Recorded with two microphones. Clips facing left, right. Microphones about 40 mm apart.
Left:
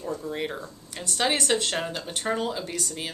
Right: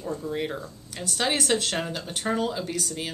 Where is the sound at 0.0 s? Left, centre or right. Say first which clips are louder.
Right 1 dB; centre.